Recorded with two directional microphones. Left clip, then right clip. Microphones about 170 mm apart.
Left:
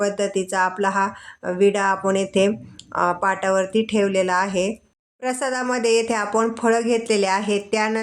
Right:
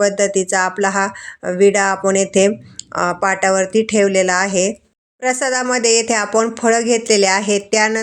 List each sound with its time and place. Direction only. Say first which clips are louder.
0.0 s speech: right 7 dB; 20° right (ahead or behind)